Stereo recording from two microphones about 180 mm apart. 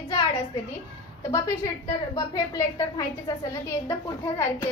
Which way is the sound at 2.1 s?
20° left (ahead or behind).